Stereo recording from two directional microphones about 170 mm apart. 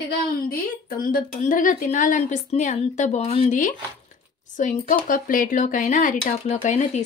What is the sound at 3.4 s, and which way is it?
Speech, 50° left (ahead or behind).